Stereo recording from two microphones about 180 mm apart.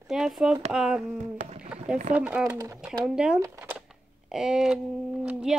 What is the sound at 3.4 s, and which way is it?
Speech, 15° right (ahead or behind).